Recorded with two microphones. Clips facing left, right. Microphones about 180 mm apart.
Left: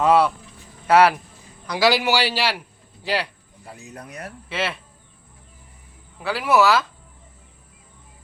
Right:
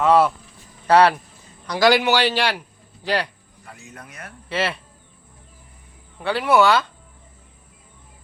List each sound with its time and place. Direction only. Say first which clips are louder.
0.1 s a man's voice: right 1 dB; centre (ahead or behind)
3.6 s speech: left 3 dB; 30° left (ahead or behind)
4.4 s speech: right 3 dB; centre (ahead or behind)
6.2 s speech: right 1 dB; 5° left (ahead or behind)